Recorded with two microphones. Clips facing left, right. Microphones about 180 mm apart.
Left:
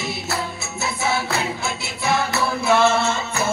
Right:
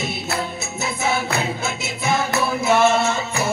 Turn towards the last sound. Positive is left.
turn(degrees=-20)  # may be behind; listen again after turning